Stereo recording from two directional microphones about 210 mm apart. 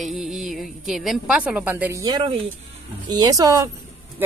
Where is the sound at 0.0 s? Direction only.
Centre (ahead or behind).